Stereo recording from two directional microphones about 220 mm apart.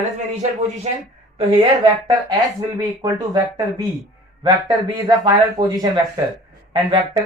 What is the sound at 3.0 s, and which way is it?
Speech, 20° right (ahead or behind).